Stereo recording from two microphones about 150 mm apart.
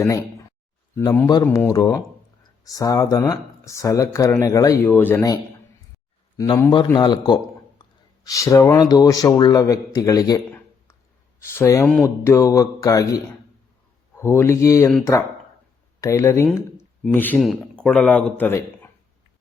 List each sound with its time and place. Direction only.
0.9 s speech: 20° left (ahead or behind)
6.3 s speech: 25° left (ahead or behind)
16.0 s speech: 20° left (ahead or behind)